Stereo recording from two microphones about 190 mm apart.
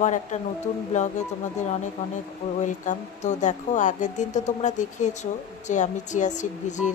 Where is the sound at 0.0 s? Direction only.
40° left (ahead or behind).